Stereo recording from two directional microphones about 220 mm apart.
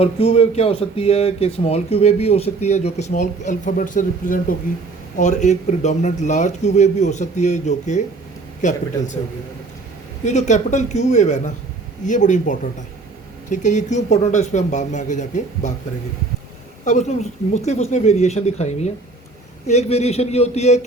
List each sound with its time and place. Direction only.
0.0 s speech: 25° left (ahead or behind)
10.2 s speech: 35° left (ahead or behind)
16.8 s speech: 35° left (ahead or behind)